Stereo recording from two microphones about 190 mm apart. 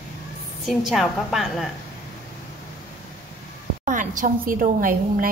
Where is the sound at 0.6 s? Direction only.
Centre (ahead or behind).